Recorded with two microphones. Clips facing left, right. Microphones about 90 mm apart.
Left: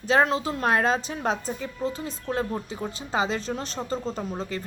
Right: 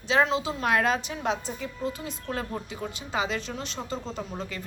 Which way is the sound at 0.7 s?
30° left (ahead or behind).